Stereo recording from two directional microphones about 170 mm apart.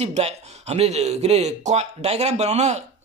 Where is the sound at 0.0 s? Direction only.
40° right (ahead or behind).